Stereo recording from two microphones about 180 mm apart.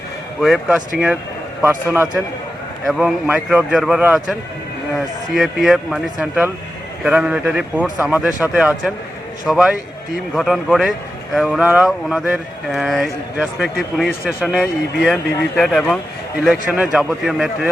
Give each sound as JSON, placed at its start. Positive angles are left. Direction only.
{"t": 0.3, "sound": "speech", "side_deg": 0}
{"t": 1.6, "sound": "a man's voice", "side_deg": -15}
{"t": 2.8, "sound": "a man's voice", "side_deg": -5}